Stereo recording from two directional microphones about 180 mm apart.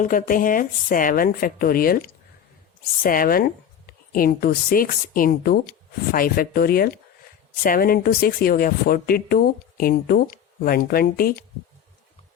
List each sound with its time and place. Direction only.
0.0 s a woman's voice: 50° left (ahead or behind)